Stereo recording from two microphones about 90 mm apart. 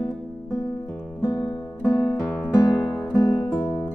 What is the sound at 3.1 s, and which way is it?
Music, 40° left (ahead or behind).